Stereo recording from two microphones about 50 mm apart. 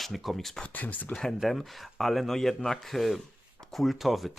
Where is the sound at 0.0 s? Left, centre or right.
Centre.